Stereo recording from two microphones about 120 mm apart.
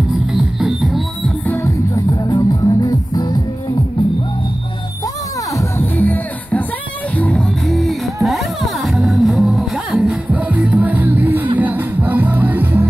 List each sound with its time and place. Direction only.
0.3 s music: 5° right (ahead or behind)
1.4 s music: 15° left (ahead or behind)
2.2 s music: 35° left (ahead or behind)
5.6 s music: 15° left (ahead or behind); by 10.1 s centre (ahead or behind)
10.3 s music: 10° right (ahead or behind)